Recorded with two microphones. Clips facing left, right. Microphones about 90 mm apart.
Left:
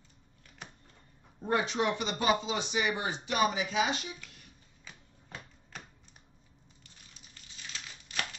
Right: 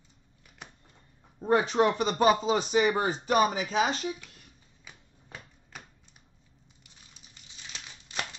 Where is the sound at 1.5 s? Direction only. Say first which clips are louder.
Right 6 dB; 40° right (ahead or behind).